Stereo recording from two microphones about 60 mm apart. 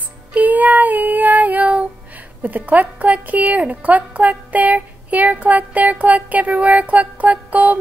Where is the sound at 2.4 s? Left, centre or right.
Right.